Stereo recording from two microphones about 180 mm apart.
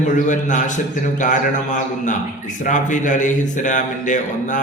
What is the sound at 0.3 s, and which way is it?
A man's voice, 45° left (ahead or behind).